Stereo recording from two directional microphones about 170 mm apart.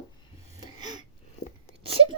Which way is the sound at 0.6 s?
25° right (ahead or behind).